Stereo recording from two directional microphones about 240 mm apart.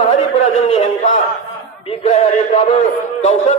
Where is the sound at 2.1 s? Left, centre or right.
Left.